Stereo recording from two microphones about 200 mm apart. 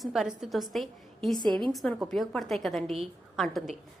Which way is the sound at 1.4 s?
25° right (ahead or behind).